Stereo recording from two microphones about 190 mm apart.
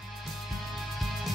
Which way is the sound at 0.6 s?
Centre (ahead or behind).